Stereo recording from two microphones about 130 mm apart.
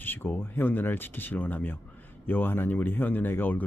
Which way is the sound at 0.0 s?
15° left (ahead or behind).